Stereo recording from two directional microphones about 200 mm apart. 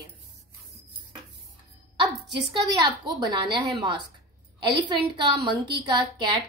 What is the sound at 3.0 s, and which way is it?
Speech, 20° right (ahead or behind).